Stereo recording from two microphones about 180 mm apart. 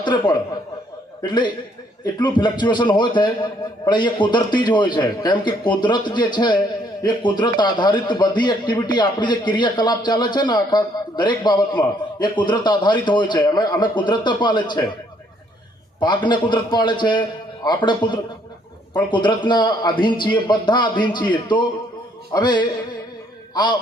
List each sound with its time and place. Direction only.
0.0 s a man's voice: 25° left (ahead or behind)
16.0 s a man's voice: 25° left (ahead or behind)